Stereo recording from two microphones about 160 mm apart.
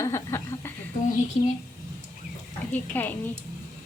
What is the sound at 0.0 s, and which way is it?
Chuckle, 20° left (ahead or behind).